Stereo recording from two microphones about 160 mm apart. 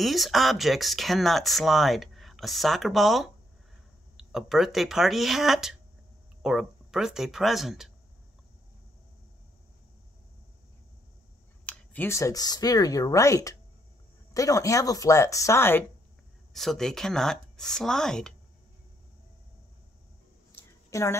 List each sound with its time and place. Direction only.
0.0 s speech: centre (ahead or behind)
11.6 s speech: 10° left (ahead or behind)
16.5 s speech: centre (ahead or behind)
20.5 s a sound: 15° left (ahead or behind)